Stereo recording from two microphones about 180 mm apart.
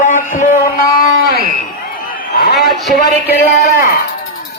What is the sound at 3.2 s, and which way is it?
Speech, 60° left (ahead or behind).